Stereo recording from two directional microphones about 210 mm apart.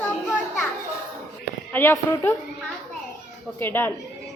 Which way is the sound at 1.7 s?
10° left (ahead or behind).